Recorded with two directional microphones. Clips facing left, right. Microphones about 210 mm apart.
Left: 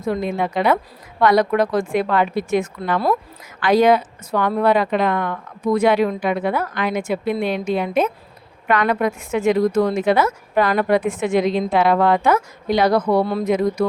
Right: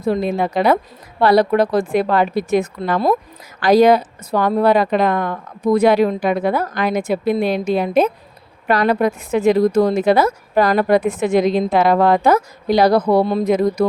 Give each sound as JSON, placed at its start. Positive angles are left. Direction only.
{"t": 0.0, "sound": "speech", "side_deg": -35}